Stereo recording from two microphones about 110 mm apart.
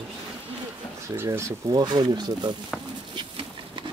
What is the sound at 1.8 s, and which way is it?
Speech, 40° right (ahead or behind).